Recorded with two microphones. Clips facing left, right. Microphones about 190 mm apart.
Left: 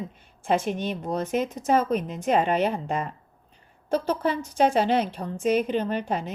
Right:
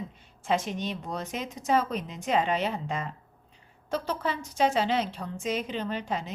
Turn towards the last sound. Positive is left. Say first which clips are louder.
# left 4 dB
turn(degrees=55)  # may be behind; listen again after turning